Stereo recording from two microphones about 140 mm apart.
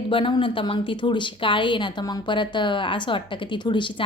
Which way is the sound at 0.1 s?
35° left (ahead or behind).